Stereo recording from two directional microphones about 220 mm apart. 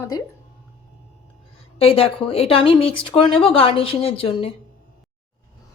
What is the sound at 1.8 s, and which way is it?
Speech, 25° left (ahead or behind).